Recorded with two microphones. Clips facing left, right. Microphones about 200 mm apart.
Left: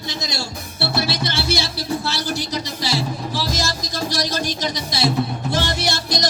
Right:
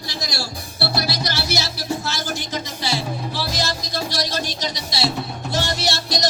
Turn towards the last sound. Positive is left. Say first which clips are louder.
# even
turn(degrees=50)  # may be behind; listen again after turning